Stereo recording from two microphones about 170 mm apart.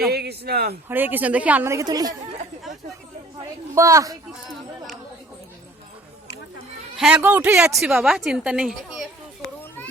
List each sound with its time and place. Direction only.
0.1 s speech: 70° right (ahead or behind)
0.9 s a woman's voice: 10° right (ahead or behind)
3.8 s speech: 20° right (ahead or behind)
6.9 s a woman's voice: 5° right (ahead or behind)